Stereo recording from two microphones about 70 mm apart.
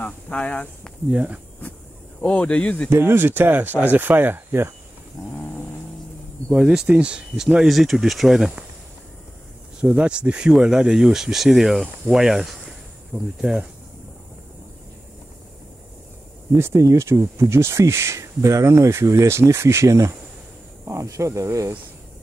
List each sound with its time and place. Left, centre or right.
0.0 s speech: centre
1.1 s speech: centre
2.2 s speech: centre
2.9 s speech: right
5.2 s a sound: left
6.5 s speech: centre
7.5 s speech: centre
9.8 s speech: centre
16.5 s speech: right